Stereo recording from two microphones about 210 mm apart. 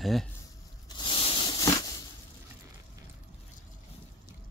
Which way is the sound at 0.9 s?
20° left (ahead or behind).